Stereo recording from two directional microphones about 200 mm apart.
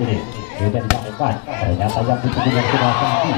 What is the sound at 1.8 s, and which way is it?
A man's voice, 25° left (ahead or behind).